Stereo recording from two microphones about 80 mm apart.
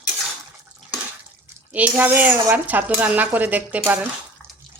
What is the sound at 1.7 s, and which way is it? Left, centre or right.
Speech, right.